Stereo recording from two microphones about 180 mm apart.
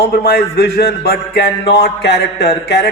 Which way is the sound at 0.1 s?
60° left (ahead or behind).